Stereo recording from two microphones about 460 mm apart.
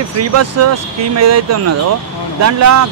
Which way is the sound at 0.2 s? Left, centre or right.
Right.